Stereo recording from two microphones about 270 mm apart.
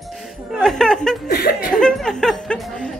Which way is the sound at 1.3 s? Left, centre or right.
Left.